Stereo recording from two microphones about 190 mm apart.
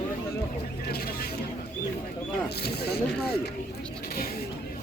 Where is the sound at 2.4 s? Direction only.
55° left (ahead or behind).